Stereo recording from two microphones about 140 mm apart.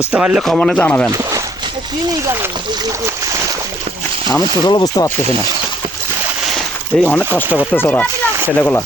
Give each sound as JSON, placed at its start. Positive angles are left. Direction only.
{"t": 0.1, "sound": "speech", "side_deg": -10}
{"t": 0.4, "sound": "speech", "side_deg": 0}
{"t": 1.1, "sound": "speech", "side_deg": -25}
{"t": 4.3, "sound": "speech", "side_deg": 30}
{"t": 6.9, "sound": "speech", "side_deg": 5}